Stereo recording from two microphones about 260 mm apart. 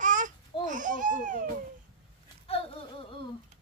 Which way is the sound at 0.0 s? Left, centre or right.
Right.